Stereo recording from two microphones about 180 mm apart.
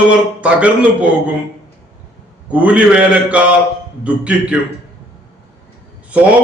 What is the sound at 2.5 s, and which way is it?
A man's voice, 10° right (ahead or behind).